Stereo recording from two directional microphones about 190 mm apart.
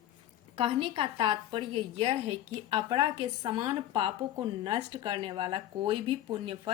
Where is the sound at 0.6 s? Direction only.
30° right (ahead or behind).